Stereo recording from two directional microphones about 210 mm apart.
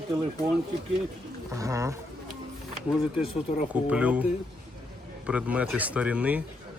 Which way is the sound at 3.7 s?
5° right (ahead or behind).